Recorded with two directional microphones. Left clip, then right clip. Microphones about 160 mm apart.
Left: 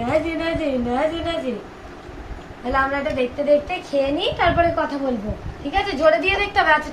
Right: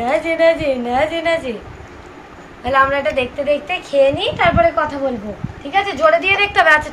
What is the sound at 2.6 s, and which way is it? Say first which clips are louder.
Speech: right 6 dB; 45° right (ahead or behind).